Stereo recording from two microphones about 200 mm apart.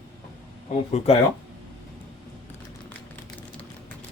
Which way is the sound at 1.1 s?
30° left (ahead or behind).